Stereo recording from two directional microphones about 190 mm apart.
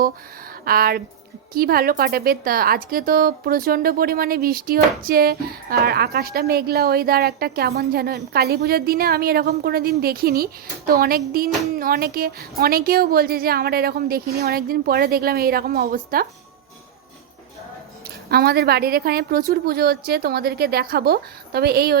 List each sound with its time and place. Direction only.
0.6 s a woman's voice: 50° right (ahead or behind)
18.3 s a woman's voice: 55° right (ahead or behind)